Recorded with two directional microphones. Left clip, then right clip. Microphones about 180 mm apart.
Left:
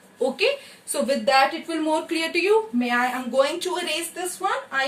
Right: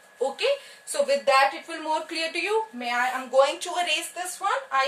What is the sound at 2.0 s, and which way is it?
A woman's voice, 15° right (ahead or behind).